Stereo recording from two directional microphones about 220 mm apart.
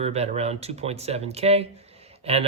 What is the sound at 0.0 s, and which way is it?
Speech, 30° right (ahead or behind).